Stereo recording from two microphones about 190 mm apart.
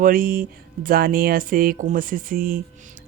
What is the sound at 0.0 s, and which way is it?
Speech, 50° right (ahead or behind).